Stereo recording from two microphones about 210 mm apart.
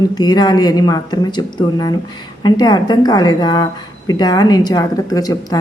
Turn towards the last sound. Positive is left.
turn(degrees=15)  # may be behind; listen again after turning